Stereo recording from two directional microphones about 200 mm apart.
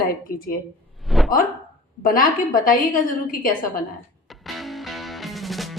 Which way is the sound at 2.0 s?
45° left (ahead or behind).